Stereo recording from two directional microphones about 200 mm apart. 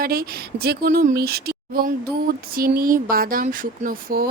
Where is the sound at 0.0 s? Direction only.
50° right (ahead or behind).